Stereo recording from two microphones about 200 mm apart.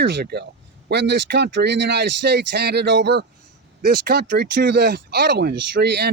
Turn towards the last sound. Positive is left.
turn(degrees=-55)  # may be behind; listen again after turning